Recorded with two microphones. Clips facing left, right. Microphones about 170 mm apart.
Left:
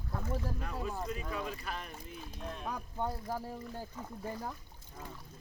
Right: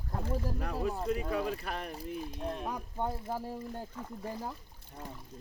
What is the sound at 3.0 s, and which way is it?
Speech, 25° right (ahead or behind).